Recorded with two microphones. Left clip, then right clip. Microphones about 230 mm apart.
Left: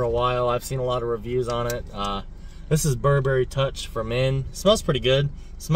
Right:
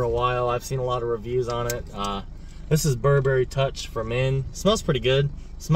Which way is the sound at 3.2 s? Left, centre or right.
Centre.